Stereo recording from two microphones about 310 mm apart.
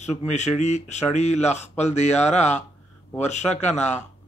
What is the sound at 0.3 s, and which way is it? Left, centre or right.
Speech, left.